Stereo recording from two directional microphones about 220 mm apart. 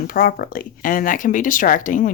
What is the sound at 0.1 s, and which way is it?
Speech, 40° left (ahead or behind).